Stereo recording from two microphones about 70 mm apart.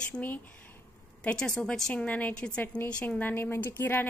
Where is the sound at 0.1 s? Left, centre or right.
Left.